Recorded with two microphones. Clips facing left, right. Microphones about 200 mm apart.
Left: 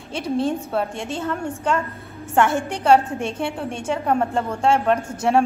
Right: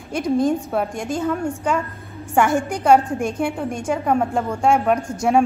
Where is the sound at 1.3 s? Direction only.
Centre (ahead or behind).